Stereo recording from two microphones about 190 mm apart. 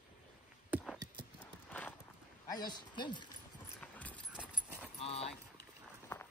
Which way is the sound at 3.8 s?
5° left (ahead or behind).